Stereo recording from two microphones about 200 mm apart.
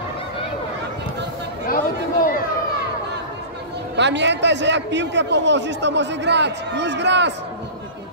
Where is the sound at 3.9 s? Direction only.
60° right (ahead or behind).